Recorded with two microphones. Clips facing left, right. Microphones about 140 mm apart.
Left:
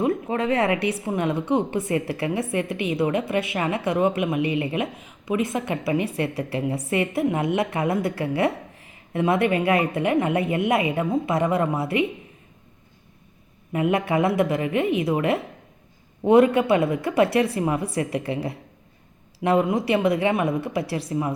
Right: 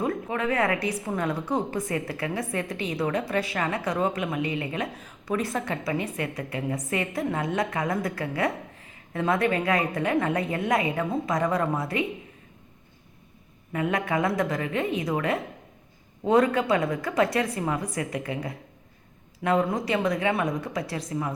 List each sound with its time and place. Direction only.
0.0 s a sound: 30° left (ahead or behind)
1.0 s a woman's voice: 20° left (ahead or behind)
13.7 s a woman's voice: 25° left (ahead or behind)